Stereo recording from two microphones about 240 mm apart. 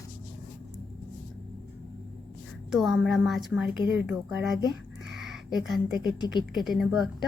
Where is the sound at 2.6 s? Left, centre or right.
Centre.